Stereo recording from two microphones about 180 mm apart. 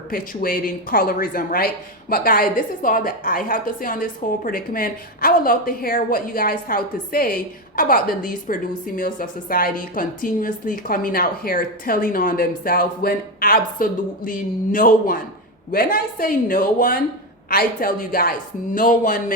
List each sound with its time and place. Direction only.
0.1 s speech: 55° left (ahead or behind)